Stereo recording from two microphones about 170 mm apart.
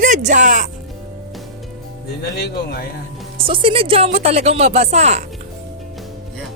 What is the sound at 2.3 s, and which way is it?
Speech, 70° left (ahead or behind).